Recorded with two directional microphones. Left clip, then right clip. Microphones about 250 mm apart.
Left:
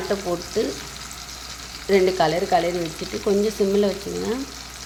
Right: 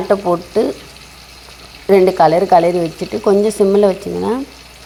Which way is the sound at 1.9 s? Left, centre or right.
Right.